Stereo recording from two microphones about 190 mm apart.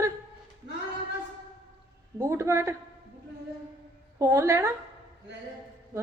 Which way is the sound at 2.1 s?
15° right (ahead or behind).